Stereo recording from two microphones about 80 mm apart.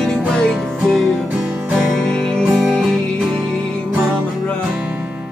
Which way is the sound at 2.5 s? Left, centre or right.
Centre.